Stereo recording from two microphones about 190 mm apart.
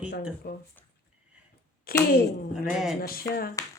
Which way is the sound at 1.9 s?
50° left (ahead or behind).